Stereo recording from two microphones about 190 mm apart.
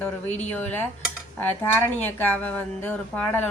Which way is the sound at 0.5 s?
10° left (ahead or behind).